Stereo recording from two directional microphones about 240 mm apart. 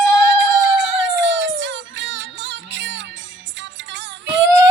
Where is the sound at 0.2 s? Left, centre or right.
Right.